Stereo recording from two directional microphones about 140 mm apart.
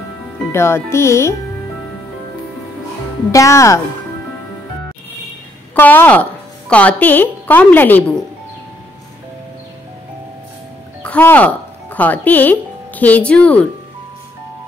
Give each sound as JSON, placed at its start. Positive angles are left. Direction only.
{"t": 0.5, "sound": "speech", "side_deg": 20}
{"t": 3.3, "sound": "speech", "side_deg": 20}
{"t": 5.8, "sound": "a woman's voice", "side_deg": 15}
{"t": 11.0, "sound": "speech", "side_deg": 10}